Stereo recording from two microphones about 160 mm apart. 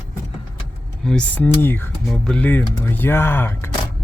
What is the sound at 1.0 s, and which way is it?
Speech, 10° left (ahead or behind).